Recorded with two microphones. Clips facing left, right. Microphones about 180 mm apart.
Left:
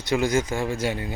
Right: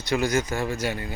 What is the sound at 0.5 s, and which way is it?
Speech, 15° left (ahead or behind).